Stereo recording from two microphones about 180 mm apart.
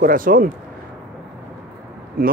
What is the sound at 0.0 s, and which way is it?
Speech, 50° right (ahead or behind).